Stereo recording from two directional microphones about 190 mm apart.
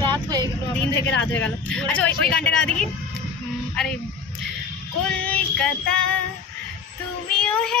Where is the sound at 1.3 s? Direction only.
5° left (ahead or behind).